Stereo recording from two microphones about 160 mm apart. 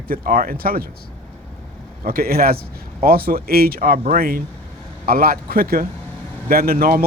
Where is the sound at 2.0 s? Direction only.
70° right (ahead or behind).